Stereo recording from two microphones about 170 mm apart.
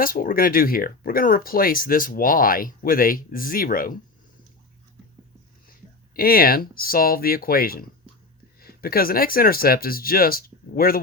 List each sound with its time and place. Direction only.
0.0 s speech: 55° left (ahead or behind)
6.1 s speech: 60° left (ahead or behind)